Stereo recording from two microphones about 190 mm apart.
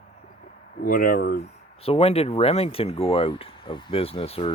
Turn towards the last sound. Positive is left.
turn(degrees=30)  # may be behind; listen again after turning